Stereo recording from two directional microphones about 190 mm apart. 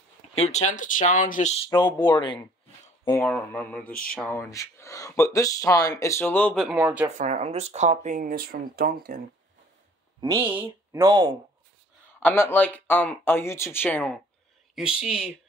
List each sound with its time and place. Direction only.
0.4 s speech: 35° left (ahead or behind)
1.7 s speech: 20° left (ahead or behind)
3.3 s speech: 5° left (ahead or behind)
6.8 s speech: 10° right (ahead or behind)
7.2 s speech: 40° right (ahead or behind)
10.4 s speech: 10° right (ahead or behind)
12.2 s speech: 10° left (ahead or behind)
14.8 s speech: 5° right (ahead or behind)